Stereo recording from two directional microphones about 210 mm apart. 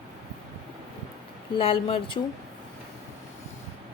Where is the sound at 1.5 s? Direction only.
25° left (ahead or behind).